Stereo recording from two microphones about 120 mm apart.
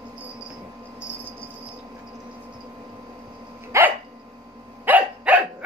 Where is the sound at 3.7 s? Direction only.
25° right (ahead or behind).